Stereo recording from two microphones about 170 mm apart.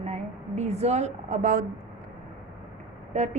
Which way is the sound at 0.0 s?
40° right (ahead or behind).